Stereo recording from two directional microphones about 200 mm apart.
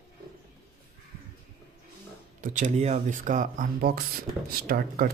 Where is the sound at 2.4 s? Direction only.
40° right (ahead or behind).